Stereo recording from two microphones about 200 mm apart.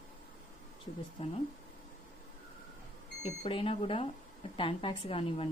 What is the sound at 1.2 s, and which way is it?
Speech, 30° left (ahead or behind).